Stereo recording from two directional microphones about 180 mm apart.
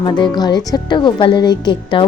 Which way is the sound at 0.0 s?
25° left (ahead or behind).